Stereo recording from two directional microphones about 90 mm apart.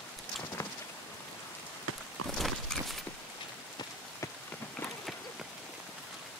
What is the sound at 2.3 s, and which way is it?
Horse, centre (ahead or behind).